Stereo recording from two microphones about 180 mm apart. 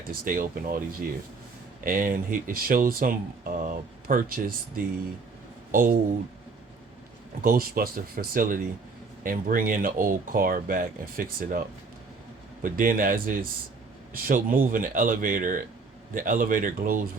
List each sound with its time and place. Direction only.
0.1 s speech: 50° right (ahead or behind)
1.8 s speech: 50° right (ahead or behind)
5.7 s speech: 50° right (ahead or behind)
7.4 s speech: 55° right (ahead or behind)
12.6 s speech: 50° right (ahead or behind)